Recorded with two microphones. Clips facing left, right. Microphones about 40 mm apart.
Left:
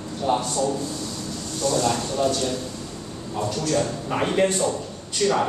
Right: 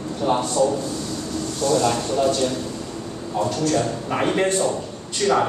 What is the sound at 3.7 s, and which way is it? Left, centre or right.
A man's voice, centre.